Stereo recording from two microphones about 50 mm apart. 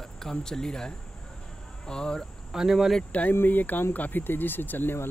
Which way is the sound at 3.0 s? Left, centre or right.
Left.